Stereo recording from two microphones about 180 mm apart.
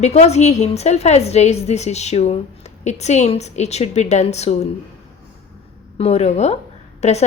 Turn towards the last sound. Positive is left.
turn(degrees=40)  # may be behind; listen again after turning